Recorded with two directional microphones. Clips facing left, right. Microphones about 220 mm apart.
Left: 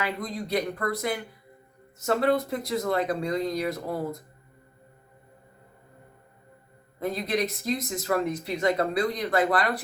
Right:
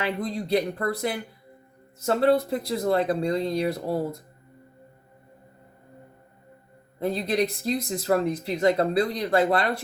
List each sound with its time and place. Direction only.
0.0 s speech: 30° right (ahead or behind)
7.0 s speech: 30° right (ahead or behind)